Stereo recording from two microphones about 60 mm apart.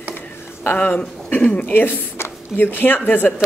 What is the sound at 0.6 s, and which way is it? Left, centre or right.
Speech, left.